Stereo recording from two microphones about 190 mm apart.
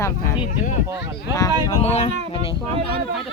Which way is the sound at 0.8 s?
15° right (ahead or behind).